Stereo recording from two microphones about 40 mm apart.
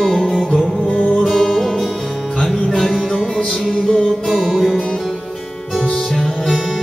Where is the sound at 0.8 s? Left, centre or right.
Left.